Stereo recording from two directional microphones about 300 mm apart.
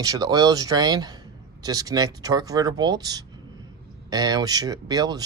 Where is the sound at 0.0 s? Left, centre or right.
Centre.